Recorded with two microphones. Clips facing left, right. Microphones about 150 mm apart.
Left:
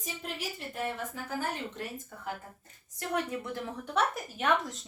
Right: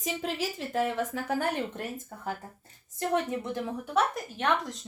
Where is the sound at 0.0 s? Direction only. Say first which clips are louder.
Right 7 dB; 90° right; by 1.8 s 65° right (ahead or behind).